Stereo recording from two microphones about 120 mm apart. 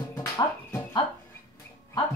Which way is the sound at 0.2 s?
30° left (ahead or behind).